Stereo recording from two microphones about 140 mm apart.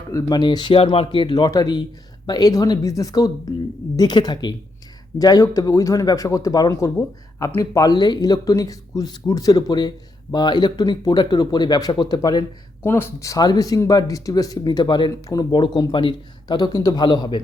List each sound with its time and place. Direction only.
0.1 s speech: 25° left (ahead or behind)
12.8 s speech: 15° left (ahead or behind); by 17.4 s 30° left (ahead or behind)